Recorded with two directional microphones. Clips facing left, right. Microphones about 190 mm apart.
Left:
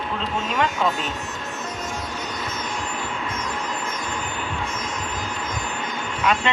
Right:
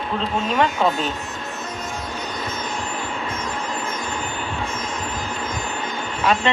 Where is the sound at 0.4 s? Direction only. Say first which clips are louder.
Right 3 dB; 35° right (ahead or behind).